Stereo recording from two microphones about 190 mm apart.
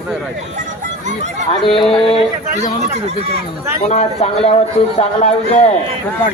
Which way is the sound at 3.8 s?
35° left (ahead or behind).